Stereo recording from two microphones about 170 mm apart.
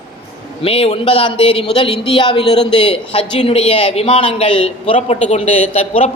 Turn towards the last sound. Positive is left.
turn(degrees=40)  # may be behind; listen again after turning